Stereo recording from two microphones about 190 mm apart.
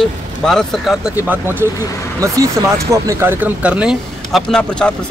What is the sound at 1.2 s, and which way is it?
Speech, 10° right (ahead or behind).